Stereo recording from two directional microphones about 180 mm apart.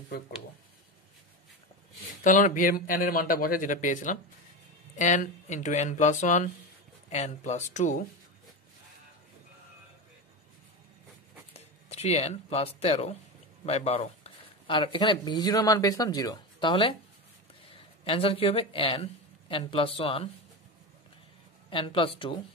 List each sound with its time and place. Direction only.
2.2 s speech: 45° left (ahead or behind)
11.5 s speech: 35° left (ahead or behind)
18.0 s speech: 30° left (ahead or behind)
21.6 s speech: 30° left (ahead or behind)